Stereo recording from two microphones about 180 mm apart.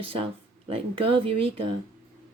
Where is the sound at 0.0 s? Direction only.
30° right (ahead or behind).